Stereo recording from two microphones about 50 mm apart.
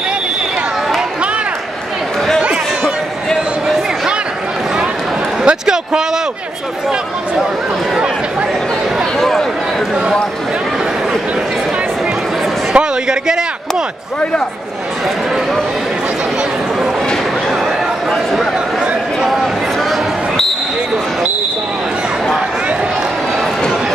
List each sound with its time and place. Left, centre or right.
2.4 s a sound: centre
5.4 s a man's voice: centre
7.9 s speech: right
9.2 s speech: centre
12.7 s a man's voice: centre
19.2 s a sound: centre